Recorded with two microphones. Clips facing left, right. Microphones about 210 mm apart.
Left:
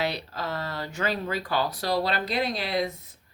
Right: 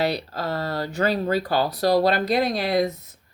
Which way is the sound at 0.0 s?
35° right (ahead or behind).